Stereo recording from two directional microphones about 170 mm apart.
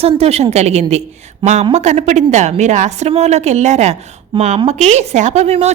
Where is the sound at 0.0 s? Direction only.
35° right (ahead or behind).